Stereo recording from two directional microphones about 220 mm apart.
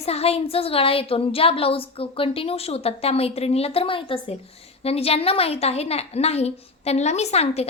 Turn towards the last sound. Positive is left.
turn(degrees=30)  # may be behind; listen again after turning